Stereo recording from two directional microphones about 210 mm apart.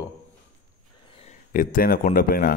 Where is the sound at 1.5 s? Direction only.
40° left (ahead or behind).